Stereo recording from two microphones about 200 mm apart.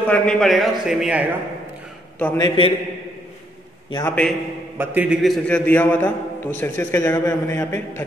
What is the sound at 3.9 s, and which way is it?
Speech, 20° left (ahead or behind).